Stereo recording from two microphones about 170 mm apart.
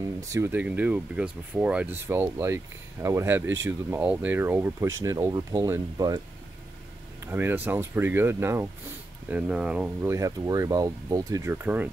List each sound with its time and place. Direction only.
0.0 s speech: 20° right (ahead or behind)
7.2 s speech: 10° right (ahead or behind)